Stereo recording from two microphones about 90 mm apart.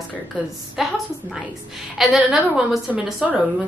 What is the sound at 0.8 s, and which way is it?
A woman's voice, centre (ahead or behind).